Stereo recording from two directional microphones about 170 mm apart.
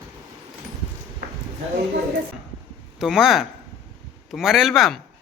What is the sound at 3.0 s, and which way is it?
A man's voice, centre (ahead or behind).